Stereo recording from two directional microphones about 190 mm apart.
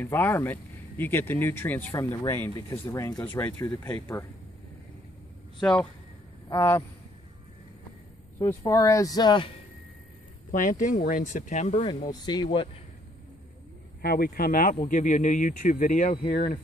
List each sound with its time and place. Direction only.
0.0 s speech: 10° left (ahead or behind)
5.6 s speech: 5° left (ahead or behind)
6.5 s speech: 15° left (ahead or behind)
8.4 s speech: 15° left (ahead or behind)
10.5 s speech: 45° left (ahead or behind); by 12.6 s 25° left (ahead or behind)
14.0 s speech: 55° left (ahead or behind)